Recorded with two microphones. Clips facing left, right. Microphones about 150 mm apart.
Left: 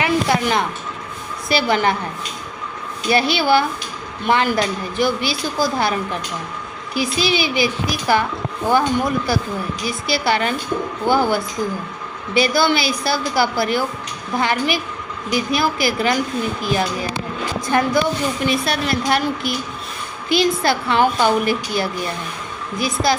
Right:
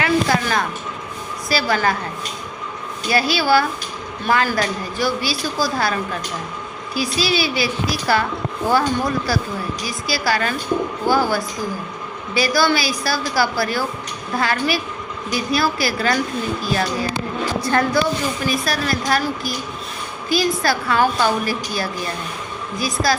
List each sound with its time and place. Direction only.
0.0 s music: 20° left (ahead or behind)
1.5 s a woman's voice: 20° left (ahead or behind)
3.1 s a woman's voice: 20° left (ahead or behind)